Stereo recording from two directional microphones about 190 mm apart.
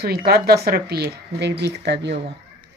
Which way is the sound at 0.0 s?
55° right (ahead or behind).